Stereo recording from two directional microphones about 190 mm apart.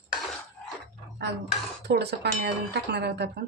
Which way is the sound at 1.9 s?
60° right (ahead or behind).